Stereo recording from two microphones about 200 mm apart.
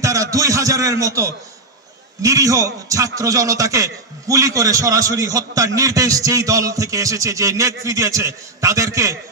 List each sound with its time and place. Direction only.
0.0 s a man's voice: 15° right (ahead or behind)